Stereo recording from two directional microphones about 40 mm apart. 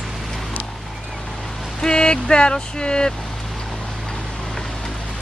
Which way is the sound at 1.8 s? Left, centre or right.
Left.